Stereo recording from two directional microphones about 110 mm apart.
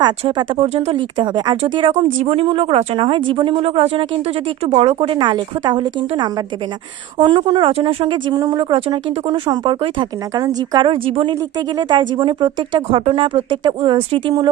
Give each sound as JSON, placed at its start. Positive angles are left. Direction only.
{"t": 0.0, "sound": "speech", "side_deg": -40}
{"t": 0.5, "sound": "a woman's voice", "side_deg": -70}
{"t": 0.9, "sound": "a woman's voice", "side_deg": -45}
{"t": 4.6, "sound": "speech", "side_deg": -70}
{"t": 7.7, "sound": "speech", "side_deg": -60}
{"t": 10.8, "sound": "speech", "side_deg": -55}
{"t": 11.8, "sound": "speech", "side_deg": -45}